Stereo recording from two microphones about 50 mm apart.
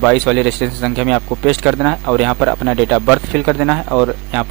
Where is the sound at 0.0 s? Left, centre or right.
Centre.